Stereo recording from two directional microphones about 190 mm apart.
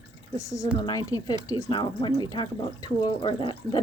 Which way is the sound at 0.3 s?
15° left (ahead or behind).